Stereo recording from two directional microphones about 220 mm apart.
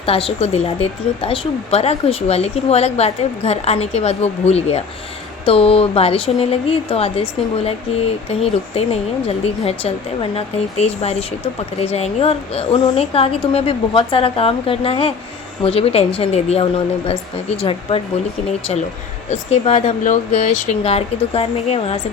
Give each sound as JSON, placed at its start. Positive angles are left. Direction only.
{"t": 0.0, "sound": "a woman's voice", "side_deg": 25}
{"t": 19.3, "sound": "a woman's voice", "side_deg": 30}